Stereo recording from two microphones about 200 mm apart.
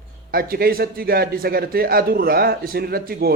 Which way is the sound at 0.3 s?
45° right (ahead or behind).